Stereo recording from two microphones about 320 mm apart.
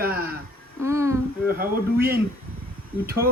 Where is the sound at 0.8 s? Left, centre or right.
Centre.